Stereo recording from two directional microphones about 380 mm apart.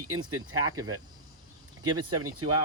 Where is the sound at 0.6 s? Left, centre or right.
Centre.